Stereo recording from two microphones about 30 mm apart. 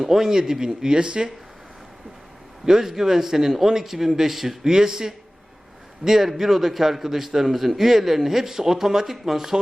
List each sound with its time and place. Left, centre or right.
0.0 s speech: centre; by 1.3 s right
2.6 s speech: centre
4.6 s speech: right
6.2 s speech: centre